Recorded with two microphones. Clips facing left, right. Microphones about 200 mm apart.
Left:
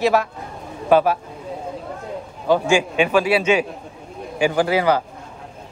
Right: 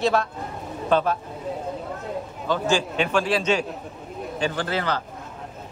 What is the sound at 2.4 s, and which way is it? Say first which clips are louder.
A woman's voice: left 6 dB; 10° left (ahead or behind).